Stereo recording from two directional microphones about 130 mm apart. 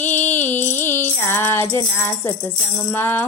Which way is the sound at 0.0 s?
15° left (ahead or behind).